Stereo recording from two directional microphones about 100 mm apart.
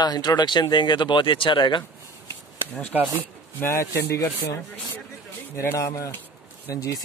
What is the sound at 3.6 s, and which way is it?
Speech, 25° left (ahead or behind).